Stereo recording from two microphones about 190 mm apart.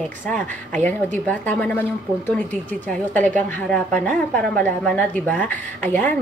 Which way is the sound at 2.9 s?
10° left (ahead or behind).